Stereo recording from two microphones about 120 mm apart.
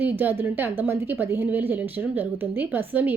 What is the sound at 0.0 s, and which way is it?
A woman's voice, 15° right (ahead or behind).